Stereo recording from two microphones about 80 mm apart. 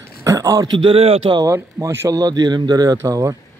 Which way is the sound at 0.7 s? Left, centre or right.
Right.